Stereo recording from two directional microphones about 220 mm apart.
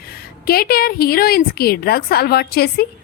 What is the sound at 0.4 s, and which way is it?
Speech, 45° left (ahead or behind).